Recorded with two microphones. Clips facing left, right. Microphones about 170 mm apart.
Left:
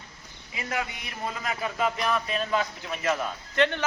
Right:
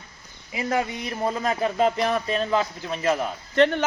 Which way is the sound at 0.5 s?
30° right (ahead or behind).